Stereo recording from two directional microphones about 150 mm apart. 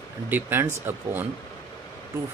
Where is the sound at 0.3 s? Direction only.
15° right (ahead or behind).